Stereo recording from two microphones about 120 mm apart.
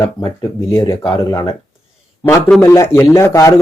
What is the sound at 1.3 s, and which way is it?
Speech, 35° left (ahead or behind).